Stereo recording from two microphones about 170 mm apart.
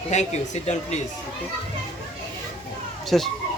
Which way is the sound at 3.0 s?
Centre (ahead or behind).